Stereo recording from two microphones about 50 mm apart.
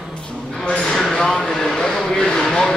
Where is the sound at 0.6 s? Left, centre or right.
Centre.